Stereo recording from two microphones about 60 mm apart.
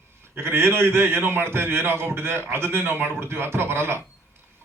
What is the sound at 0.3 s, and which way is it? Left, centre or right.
Speech, right.